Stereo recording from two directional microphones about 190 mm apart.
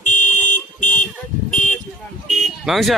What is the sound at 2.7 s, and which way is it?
Speech, centre (ahead or behind).